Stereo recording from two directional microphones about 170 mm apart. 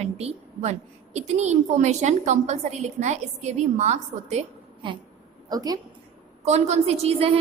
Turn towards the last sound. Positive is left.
turn(degrees=-35)  # may be behind; listen again after turning